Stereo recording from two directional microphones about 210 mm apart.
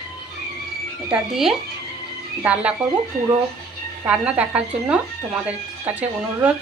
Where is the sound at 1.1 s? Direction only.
Centre (ahead or behind).